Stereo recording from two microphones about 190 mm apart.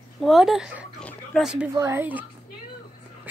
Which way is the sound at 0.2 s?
Centre (ahead or behind).